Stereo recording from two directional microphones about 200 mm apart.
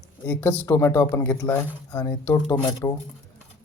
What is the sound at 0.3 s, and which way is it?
Speech, 10° left (ahead or behind).